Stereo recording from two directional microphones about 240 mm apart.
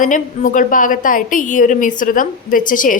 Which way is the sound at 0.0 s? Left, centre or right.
Left.